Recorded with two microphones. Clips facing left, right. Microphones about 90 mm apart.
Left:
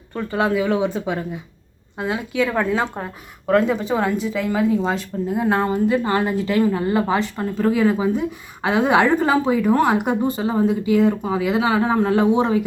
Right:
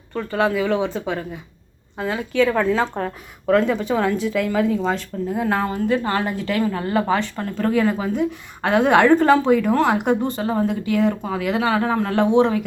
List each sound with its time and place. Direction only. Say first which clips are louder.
0.1 s a woman's voice: even; 15° left (ahead or behind)
5.5 s a woman's voice: left 3 dB; 20° left (ahead or behind)
5.9 s a woman's voice: left 2 dB; 5° left (ahead or behind)